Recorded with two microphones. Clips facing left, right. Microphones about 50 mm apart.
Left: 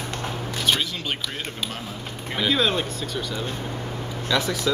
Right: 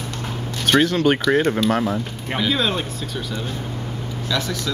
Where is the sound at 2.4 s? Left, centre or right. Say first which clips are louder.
Even; centre.